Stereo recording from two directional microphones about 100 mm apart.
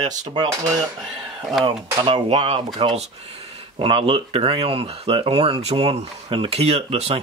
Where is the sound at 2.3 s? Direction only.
90° right.